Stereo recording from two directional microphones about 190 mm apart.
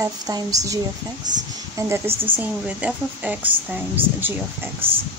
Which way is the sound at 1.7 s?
15° right (ahead or behind).